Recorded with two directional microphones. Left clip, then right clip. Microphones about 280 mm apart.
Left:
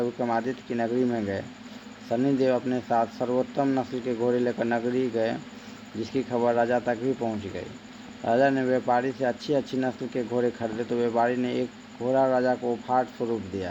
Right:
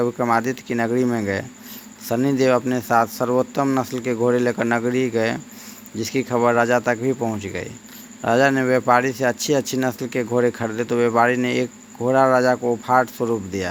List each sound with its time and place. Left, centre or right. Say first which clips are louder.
0.0 s speech: right 7 dB; right